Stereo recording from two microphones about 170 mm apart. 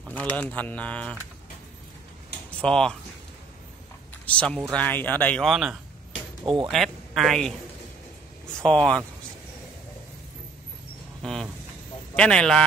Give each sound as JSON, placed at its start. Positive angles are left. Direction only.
{"t": 0.1, "sound": "speech", "side_deg": 10}
{"t": 2.6, "sound": "a man's voice", "side_deg": 5}
{"t": 4.3, "sound": "speech", "side_deg": 5}
{"t": 6.4, "sound": "speech", "side_deg": -30}
{"t": 6.7, "sound": "speech", "side_deg": 0}
{"t": 11.2, "sound": "vehicle", "side_deg": 5}
{"t": 12.2, "sound": "a man's voice", "side_deg": 5}